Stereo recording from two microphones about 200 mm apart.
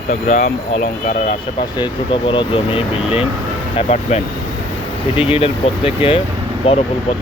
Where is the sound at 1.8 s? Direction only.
25° left (ahead or behind).